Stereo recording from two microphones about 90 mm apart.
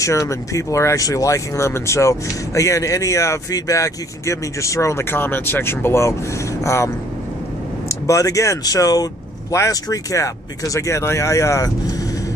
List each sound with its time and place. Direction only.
0.0 s speech: 35° left (ahead or behind)
8.1 s speech: 40° left (ahead or behind)